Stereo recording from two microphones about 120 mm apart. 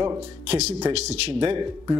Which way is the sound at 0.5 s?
60° right (ahead or behind).